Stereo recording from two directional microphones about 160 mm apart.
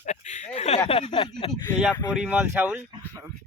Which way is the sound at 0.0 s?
50° left (ahead or behind).